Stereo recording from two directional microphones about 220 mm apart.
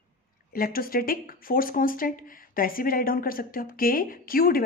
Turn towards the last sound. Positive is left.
turn(degrees=40)  # may be behind; listen again after turning